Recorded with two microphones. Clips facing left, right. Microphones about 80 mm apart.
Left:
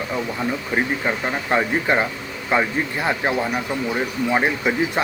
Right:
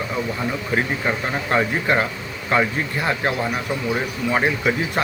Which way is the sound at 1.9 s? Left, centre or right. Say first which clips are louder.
Even; left.